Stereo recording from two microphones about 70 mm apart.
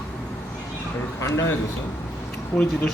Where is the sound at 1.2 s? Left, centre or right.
Left.